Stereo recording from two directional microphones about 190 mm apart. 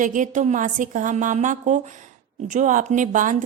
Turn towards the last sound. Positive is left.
turn(degrees=-45)  # may be behind; listen again after turning